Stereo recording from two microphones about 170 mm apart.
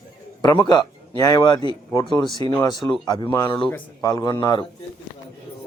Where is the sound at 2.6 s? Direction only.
20° left (ahead or behind).